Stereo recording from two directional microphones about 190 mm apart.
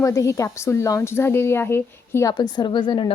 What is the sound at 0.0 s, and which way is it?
A woman's voice, 15° left (ahead or behind).